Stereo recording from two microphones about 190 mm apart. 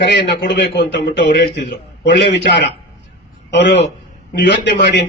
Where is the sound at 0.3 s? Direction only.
65° left (ahead or behind).